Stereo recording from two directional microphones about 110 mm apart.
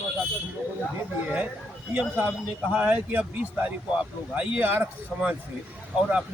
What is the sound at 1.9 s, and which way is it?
Speech, 10° right (ahead or behind).